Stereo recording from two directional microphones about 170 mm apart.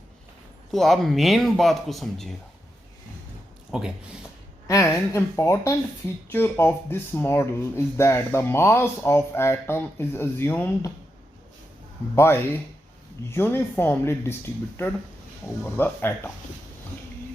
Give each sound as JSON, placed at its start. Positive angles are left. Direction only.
{"t": 0.7, "sound": "speech", "side_deg": 0}
{"t": 3.7, "sound": "speech", "side_deg": -5}
{"t": 4.7, "sound": "speech", "side_deg": 15}
{"t": 12.1, "sound": "speech", "side_deg": 15}